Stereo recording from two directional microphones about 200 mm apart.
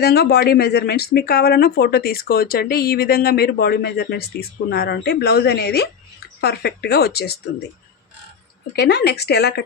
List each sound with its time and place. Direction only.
0.0 s speech: 50° left (ahead or behind)
8.7 s speech: 55° left (ahead or behind)